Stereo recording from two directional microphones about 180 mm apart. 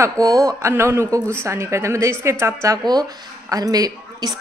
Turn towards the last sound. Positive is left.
turn(degrees=-20)  # may be behind; listen again after turning